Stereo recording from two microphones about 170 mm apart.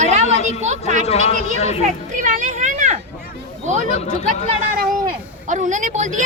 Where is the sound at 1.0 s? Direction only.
40° left (ahead or behind).